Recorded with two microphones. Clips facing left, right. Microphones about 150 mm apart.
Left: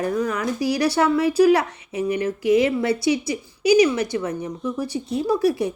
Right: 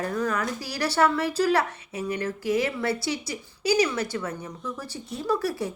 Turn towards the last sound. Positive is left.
turn(degrees=15)  # may be behind; listen again after turning